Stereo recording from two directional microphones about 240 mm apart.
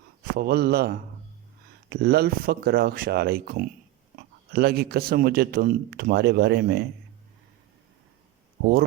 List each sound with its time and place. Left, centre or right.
0.3 s a man's voice: right